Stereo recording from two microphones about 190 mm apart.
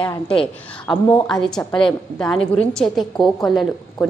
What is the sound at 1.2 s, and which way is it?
A woman's voice, 5° left (ahead or behind).